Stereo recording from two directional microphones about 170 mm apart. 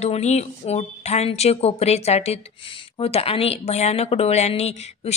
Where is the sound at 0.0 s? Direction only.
40° left (ahead or behind).